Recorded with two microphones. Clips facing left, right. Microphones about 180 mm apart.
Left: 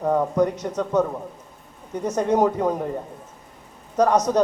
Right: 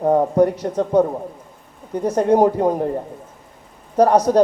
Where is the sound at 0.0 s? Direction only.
35° right (ahead or behind).